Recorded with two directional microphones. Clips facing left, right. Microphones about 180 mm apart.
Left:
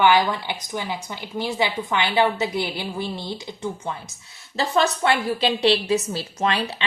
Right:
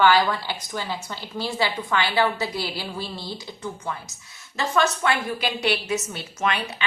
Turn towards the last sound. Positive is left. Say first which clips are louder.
# left 3 dB
turn(degrees=30)  # may be behind; listen again after turning